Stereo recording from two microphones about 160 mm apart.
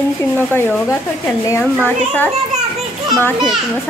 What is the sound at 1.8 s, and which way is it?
Speech, 10° left (ahead or behind).